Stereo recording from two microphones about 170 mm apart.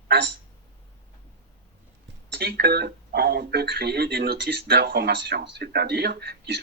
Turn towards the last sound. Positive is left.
turn(degrees=-75)  # may be behind; listen again after turning